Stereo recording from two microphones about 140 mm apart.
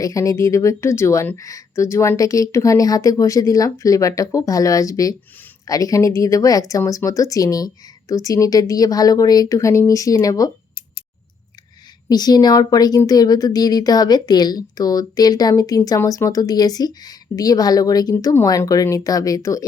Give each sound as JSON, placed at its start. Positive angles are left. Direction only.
{"t": 0.0, "sound": "speech", "side_deg": 25}
{"t": 12.0, "sound": "speech", "side_deg": 30}